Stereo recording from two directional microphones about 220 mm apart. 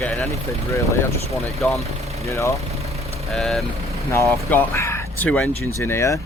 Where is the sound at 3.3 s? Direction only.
Centre (ahead or behind).